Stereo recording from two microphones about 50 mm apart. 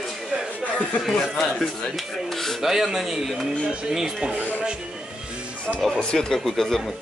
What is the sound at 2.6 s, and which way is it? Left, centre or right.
Speech, centre.